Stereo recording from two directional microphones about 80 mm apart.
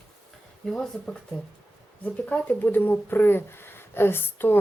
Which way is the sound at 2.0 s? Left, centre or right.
Centre.